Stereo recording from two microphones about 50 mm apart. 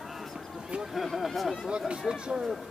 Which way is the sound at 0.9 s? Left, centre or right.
Centre.